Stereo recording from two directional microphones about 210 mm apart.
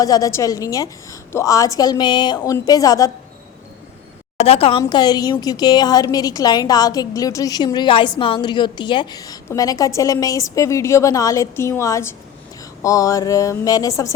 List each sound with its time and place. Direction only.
0.0 s a woman's voice: 15° left (ahead or behind)
4.4 s a woman's voice: 30° left (ahead or behind)